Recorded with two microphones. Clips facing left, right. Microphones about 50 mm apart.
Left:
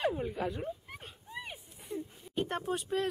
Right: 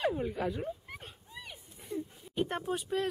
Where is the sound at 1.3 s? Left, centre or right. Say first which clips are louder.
Left 5 dB; left.